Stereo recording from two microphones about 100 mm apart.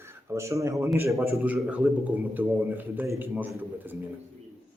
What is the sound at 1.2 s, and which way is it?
A man's voice, 15° right (ahead or behind).